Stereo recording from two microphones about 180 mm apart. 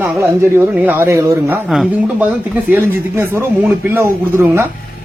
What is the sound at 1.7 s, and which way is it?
Speech, centre (ahead or behind).